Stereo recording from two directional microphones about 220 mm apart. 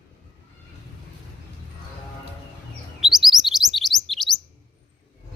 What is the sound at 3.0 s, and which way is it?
Chirp, centre (ahead or behind).